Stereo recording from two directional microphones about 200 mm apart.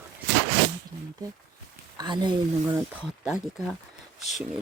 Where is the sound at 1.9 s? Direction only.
20° right (ahead or behind).